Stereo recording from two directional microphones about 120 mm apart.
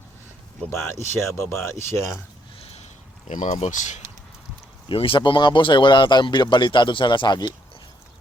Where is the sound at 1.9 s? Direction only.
25° left (ahead or behind).